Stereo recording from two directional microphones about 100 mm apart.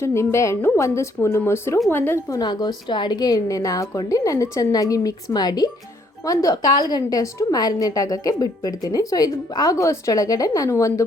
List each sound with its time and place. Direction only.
0.0 s a woman's voice: 25° left (ahead or behind)
2.3 s a woman's voice: 45° left (ahead or behind)